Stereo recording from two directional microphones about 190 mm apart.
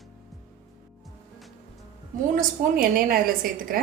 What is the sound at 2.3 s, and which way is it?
A woman's voice, 50° right (ahead or behind).